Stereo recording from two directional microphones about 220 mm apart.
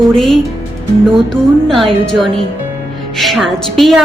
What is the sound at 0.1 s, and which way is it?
Speech, centre (ahead or behind).